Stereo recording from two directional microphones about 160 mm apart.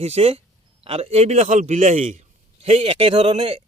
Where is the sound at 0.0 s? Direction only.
40° right (ahead or behind).